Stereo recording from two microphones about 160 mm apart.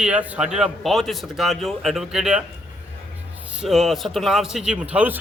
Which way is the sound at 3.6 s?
Centre (ahead or behind).